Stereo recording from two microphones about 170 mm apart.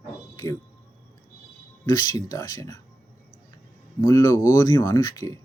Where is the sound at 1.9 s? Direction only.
25° left (ahead or behind).